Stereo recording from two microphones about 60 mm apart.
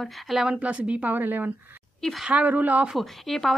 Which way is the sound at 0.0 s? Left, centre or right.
Centre.